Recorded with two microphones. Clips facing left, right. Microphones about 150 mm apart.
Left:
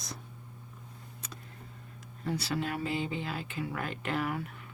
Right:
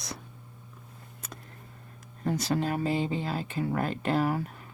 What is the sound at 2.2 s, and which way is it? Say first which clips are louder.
Speech: right 5 dB; 45° right (ahead or behind).